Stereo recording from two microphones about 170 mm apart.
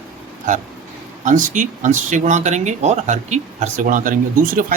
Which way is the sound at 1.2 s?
50° right (ahead or behind).